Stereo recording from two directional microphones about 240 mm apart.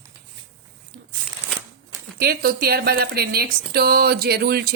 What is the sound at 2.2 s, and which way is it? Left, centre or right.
Speech, right.